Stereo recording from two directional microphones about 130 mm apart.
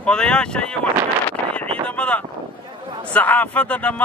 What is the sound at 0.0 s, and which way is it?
Speech, 5° left (ahead or behind).